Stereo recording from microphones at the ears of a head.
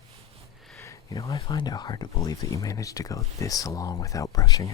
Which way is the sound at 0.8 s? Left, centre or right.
Left.